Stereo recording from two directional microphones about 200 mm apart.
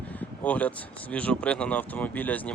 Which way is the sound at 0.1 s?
10° left (ahead or behind).